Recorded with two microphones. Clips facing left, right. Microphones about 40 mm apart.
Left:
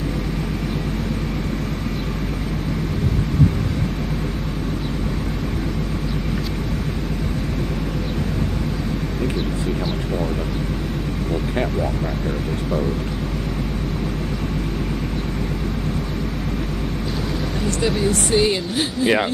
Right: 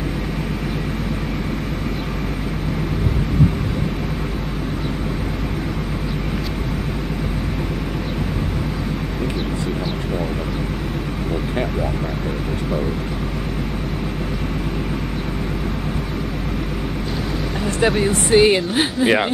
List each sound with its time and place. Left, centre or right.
17.6 s speech: right
19.0 s speech: centre